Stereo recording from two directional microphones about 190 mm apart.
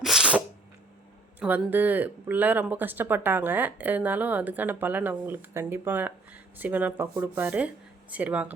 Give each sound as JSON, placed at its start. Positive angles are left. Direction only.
{"t": 0.0, "sound": "sneeze", "side_deg": -5}
{"t": 1.4, "sound": "speech", "side_deg": -10}